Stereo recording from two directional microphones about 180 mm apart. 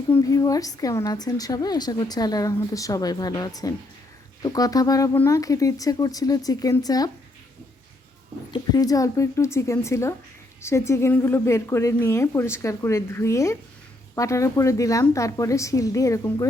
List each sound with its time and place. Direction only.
0.1 s a woman's voice: 20° left (ahead or behind)
8.5 s speech: 20° left (ahead or behind)